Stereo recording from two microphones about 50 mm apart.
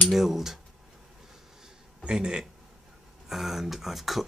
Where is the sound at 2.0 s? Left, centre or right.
Centre.